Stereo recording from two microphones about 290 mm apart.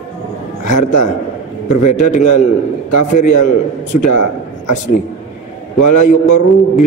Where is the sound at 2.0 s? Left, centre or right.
Left.